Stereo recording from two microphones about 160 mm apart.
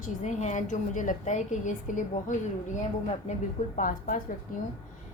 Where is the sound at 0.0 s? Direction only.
45° left (ahead or behind).